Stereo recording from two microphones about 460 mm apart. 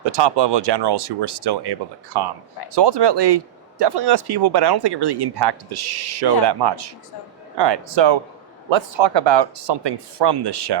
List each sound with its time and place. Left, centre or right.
0.0 s speech: right